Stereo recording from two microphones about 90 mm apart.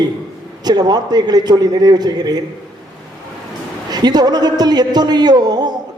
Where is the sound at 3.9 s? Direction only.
50° right (ahead or behind).